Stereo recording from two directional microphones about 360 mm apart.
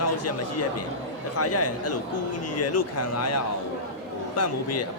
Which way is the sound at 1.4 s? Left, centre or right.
Left.